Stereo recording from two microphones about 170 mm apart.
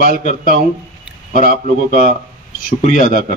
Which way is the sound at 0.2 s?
45° left (ahead or behind).